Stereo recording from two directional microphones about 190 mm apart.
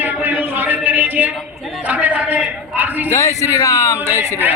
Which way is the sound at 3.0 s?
15° left (ahead or behind).